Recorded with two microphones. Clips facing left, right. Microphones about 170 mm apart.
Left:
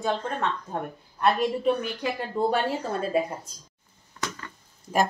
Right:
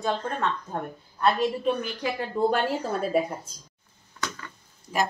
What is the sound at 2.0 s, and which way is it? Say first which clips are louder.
A woman's voice: right 2 dB; centre (ahead or behind).